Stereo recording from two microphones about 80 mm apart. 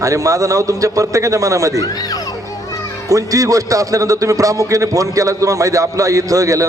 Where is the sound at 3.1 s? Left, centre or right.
Right.